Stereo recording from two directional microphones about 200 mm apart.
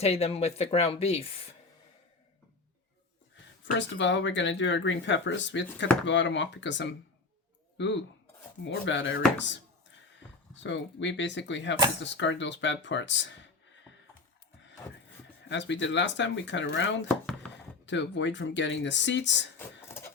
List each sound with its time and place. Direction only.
0.0 s speech: 30° left (ahead or behind)
3.8 s speech: 65° left (ahead or behind)
10.6 s speech: 65° left (ahead or behind)
15.4 s speech: 65° left (ahead or behind)